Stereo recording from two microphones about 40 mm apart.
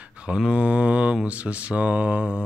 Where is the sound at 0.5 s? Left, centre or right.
Right.